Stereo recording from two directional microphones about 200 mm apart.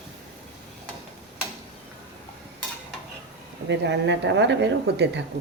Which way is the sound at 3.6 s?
65° right (ahead or behind).